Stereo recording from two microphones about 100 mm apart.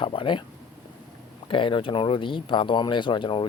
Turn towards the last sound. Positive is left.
turn(degrees=55)  # may be behind; listen again after turning